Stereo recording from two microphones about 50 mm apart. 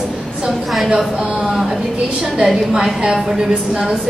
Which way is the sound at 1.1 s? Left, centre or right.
Centre.